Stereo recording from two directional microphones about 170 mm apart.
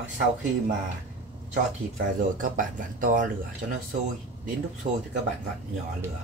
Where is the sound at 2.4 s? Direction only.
50° right (ahead or behind).